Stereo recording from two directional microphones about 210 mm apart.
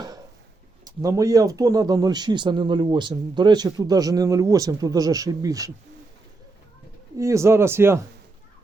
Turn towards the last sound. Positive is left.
turn(degrees=-10)  # may be behind; listen again after turning